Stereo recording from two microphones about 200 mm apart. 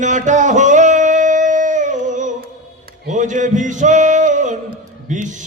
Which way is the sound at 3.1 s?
40° right (ahead or behind).